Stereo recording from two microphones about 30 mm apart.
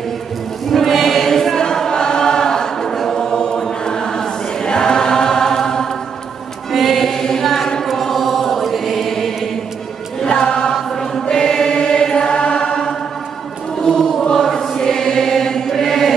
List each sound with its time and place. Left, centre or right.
0.7 s choir: centre
1.6 s choir: left
2.9 s choir: centre
3.2 s chant: left
3.8 s choir: left
6.7 s choir: centre
7.1 s choir: centre
7.4 s a sound: centre
7.9 s chant: centre
10.4 s chant: left
10.7 s choir: centre
12.5 s chant: left
13.9 s choir: centre
14.3 s choir: centre